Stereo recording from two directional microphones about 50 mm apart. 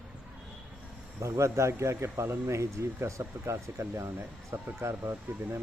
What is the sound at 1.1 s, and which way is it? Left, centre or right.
A man's voice, right.